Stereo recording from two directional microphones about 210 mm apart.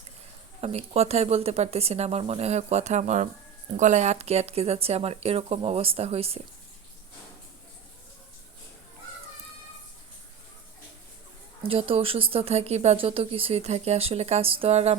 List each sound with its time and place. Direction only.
0.6 s speech: 30° right (ahead or behind)
11.6 s speech: 25° right (ahead or behind)